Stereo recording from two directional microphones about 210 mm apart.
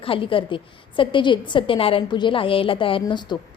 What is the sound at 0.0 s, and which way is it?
A woman's voice, 25° left (ahead or behind).